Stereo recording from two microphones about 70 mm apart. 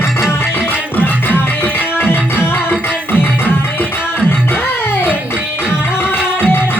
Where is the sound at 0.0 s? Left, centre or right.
Left.